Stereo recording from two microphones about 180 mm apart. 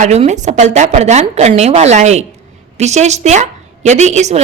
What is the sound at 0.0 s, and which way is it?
A woman's voice, 40° right (ahead or behind).